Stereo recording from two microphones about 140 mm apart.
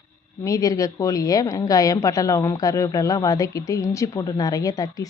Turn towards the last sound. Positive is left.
turn(degrees=25)  # may be behind; listen again after turning